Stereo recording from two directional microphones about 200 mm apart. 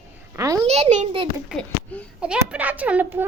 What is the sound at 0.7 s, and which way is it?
Speech, 35° right (ahead or behind).